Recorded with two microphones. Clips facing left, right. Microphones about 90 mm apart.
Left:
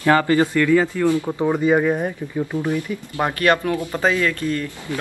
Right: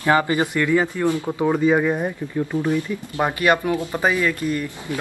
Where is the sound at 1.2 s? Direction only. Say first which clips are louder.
Even; centre (ahead or behind).